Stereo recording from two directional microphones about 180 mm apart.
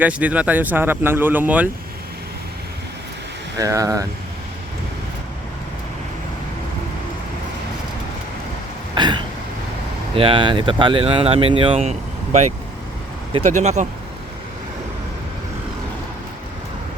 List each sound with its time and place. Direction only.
0.0 s speech: 10° right (ahead or behind)
3.6 s speech: 20° right (ahead or behind)
9.0 s a sound: 25° right (ahead or behind)
10.2 s speech: 30° right (ahead or behind)